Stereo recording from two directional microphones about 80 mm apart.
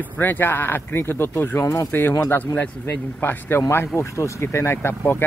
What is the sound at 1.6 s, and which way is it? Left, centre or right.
Speech, left.